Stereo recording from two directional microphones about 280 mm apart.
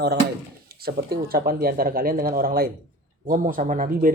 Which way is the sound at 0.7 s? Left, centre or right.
Right.